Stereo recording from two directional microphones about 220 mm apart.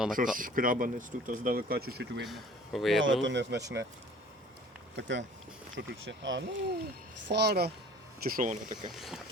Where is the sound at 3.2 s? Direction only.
55° right (ahead or behind).